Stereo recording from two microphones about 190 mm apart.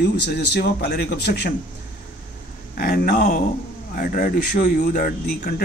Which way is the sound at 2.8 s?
50° left (ahead or behind).